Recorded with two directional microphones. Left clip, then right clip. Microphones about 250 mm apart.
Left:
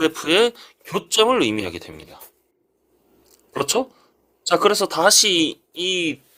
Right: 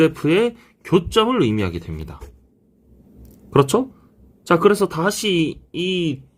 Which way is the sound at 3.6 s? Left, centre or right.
Centre.